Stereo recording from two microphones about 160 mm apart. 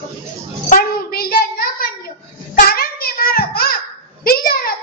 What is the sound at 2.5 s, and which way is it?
Child singing, 70° left (ahead or behind).